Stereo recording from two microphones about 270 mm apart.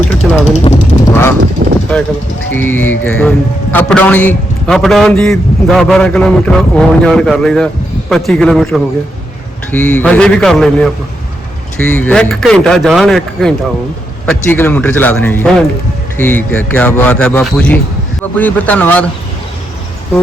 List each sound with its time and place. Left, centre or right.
0.2 s a man's voice: centre
1.6 s vehicle: right
2.5 s a man's voice: centre
11.9 s a man's voice: centre